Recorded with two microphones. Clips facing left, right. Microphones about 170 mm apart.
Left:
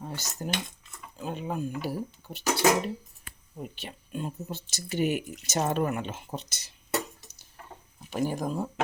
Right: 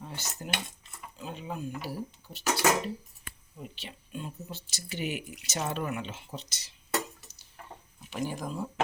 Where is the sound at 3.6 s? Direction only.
50° left (ahead or behind).